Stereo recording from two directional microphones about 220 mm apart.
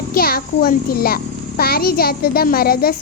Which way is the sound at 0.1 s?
40° left (ahead or behind).